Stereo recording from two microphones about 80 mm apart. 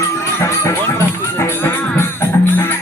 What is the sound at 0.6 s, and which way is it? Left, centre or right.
Music, left.